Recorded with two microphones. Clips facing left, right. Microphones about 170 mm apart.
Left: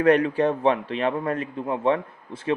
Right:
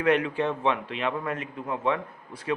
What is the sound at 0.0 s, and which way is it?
A man's voice, 35° left (ahead or behind).